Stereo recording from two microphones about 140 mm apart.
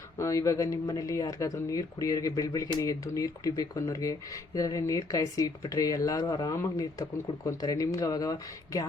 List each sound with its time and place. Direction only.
0.2 s speech: 20° left (ahead or behind)